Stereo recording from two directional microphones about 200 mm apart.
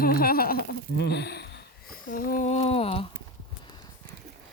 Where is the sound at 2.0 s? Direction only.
40° left (ahead or behind).